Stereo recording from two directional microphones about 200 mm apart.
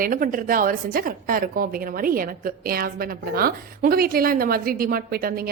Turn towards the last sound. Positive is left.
turn(degrees=-45)  # may be behind; listen again after turning